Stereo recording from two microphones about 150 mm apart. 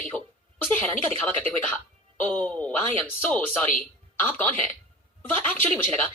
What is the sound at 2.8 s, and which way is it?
Speech, 35° right (ahead or behind).